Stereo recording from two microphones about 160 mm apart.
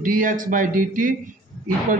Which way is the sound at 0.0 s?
55° right (ahead or behind).